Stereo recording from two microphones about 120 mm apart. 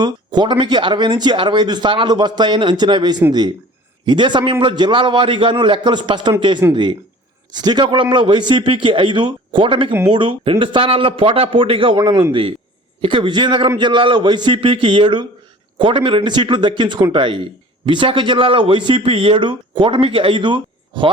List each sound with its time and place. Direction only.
0.0 s speech: 40° right (ahead or behind)
6.6 s speech: 20° right (ahead or behind)
7.5 s speech: 35° right (ahead or behind)